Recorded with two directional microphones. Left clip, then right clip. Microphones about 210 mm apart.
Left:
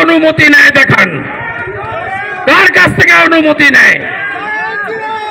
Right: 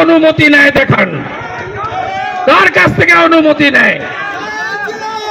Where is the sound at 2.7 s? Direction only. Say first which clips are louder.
Left 2 dB; 45° left (ahead or behind).